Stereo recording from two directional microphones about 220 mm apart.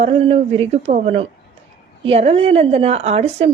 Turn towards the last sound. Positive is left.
turn(degrees=-30)  # may be behind; listen again after turning